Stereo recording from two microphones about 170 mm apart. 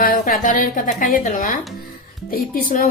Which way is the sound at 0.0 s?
50° left (ahead or behind).